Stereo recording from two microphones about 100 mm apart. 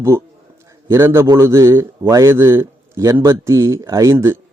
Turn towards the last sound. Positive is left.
turn(degrees=-30)  # may be behind; listen again after turning